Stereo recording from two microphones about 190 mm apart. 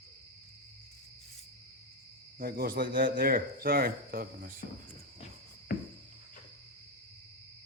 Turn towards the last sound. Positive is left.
turn(degrees=45)  # may be behind; listen again after turning